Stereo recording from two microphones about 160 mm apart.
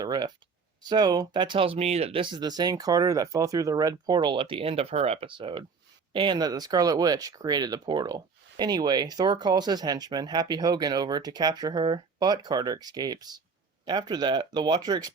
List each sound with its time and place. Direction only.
0.0 s speech: 25° right (ahead or behind)